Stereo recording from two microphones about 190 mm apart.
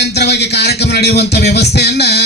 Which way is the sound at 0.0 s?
60° left (ahead or behind).